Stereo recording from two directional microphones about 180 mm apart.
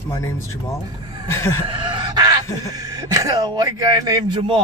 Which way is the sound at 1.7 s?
25° right (ahead or behind).